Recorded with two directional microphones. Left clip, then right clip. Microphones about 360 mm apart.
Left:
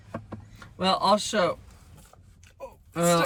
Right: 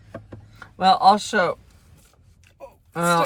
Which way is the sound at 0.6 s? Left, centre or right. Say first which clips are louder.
Right 9 dB; centre.